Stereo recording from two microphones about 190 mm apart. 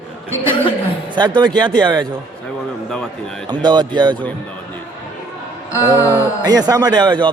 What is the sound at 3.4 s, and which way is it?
Speech, 20° right (ahead or behind).